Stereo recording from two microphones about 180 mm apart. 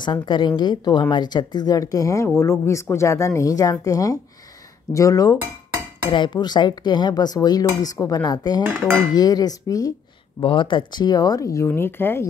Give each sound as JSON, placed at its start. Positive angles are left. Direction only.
{"t": 0.0, "sound": "speech", "side_deg": 25}
{"t": 8.6, "sound": "dishes", "side_deg": -15}
{"t": 9.1, "sound": "speech", "side_deg": 20}